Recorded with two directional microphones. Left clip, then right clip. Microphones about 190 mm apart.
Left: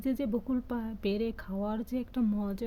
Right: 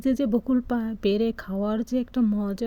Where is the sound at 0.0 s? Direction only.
25° right (ahead or behind).